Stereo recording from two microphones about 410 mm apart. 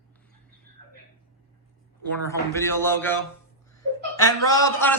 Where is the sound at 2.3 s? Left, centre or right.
Centre.